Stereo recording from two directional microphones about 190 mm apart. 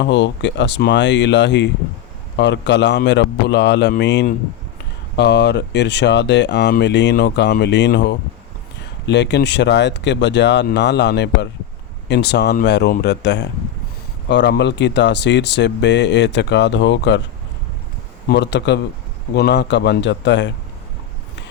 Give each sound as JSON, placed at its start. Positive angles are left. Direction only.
{"t": 0.0, "sound": "speech", "side_deg": 70}
{"t": 18.3, "sound": "speech", "side_deg": 65}